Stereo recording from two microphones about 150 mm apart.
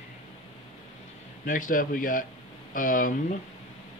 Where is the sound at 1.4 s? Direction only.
65° left (ahead or behind).